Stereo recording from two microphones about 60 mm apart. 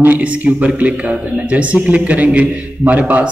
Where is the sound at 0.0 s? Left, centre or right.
Right.